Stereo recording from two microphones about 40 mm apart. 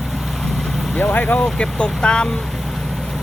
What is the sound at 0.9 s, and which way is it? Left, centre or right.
Speech, left.